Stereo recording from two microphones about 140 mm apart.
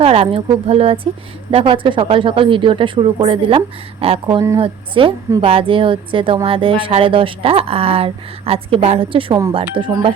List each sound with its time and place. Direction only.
0.0 s speech: 45° right (ahead or behind)